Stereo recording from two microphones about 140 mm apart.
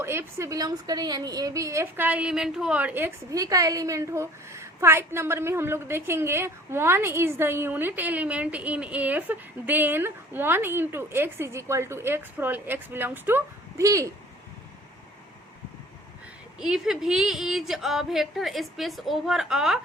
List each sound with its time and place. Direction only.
0.0 s a woman's voice: 20° right (ahead or behind)
16.6 s speech: 5° right (ahead or behind)